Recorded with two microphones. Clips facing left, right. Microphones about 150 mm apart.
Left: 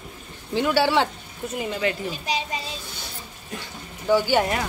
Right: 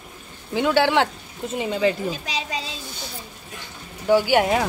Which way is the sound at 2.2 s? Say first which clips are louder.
Left 1 dB; 90° right.